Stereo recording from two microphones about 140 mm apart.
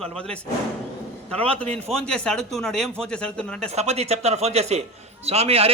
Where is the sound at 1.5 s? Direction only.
10° left (ahead or behind).